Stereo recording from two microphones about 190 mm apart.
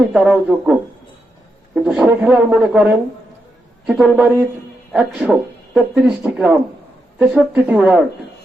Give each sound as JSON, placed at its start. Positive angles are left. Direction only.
{"t": 0.1, "sound": "speech", "side_deg": -5}